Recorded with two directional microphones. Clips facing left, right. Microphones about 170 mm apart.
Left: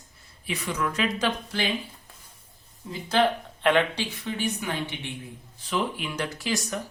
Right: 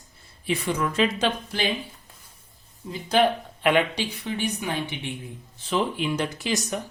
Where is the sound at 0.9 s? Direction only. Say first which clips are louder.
Right 3 dB; 25° right (ahead or behind).